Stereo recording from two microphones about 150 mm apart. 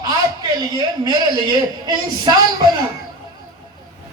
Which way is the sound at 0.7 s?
25° right (ahead or behind).